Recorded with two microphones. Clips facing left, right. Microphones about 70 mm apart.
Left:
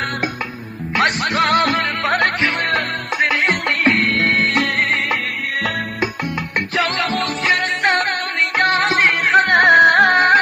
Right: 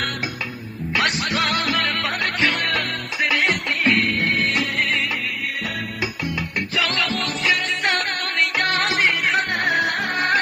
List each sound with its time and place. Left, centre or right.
0.9 s music: left
2.6 s music: left
3.5 s music: left
6.7 s music: left
7.1 s music: left
9.0 s music: left